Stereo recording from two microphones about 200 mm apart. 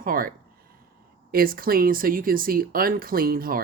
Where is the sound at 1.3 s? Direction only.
45° right (ahead or behind).